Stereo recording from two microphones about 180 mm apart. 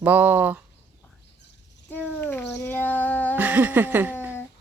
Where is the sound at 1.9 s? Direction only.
10° left (ahead or behind).